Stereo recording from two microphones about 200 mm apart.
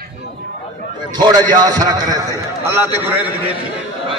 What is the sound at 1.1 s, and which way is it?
A man's voice, 20° right (ahead or behind).